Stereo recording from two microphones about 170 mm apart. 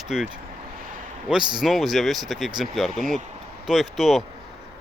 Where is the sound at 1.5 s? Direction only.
Centre (ahead or behind).